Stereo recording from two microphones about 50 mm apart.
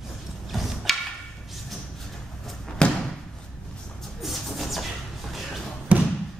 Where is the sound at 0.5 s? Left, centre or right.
Centre.